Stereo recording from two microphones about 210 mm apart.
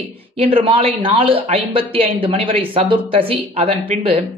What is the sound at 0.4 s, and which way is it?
Speech, 25° right (ahead or behind).